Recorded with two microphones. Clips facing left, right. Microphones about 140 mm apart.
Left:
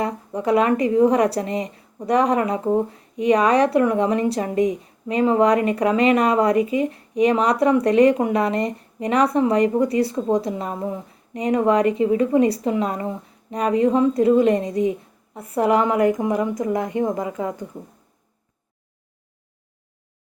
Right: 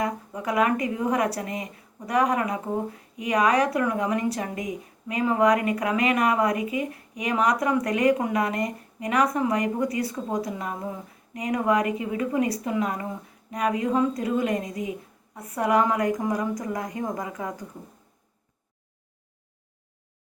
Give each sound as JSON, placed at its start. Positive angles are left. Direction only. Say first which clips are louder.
{"t": 0.0, "sound": "a woman's voice", "louder": "left 5 dB", "side_deg": 30}